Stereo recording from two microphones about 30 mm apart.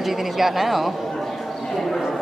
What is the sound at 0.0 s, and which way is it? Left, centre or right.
Speech, centre.